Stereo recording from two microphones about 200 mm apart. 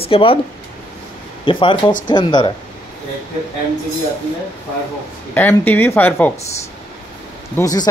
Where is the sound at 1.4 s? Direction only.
25° left (ahead or behind).